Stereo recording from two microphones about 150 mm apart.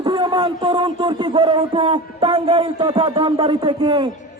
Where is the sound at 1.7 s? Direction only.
35° right (ahead or behind).